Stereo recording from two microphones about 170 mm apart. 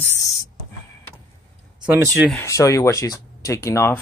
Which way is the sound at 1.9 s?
15° right (ahead or behind).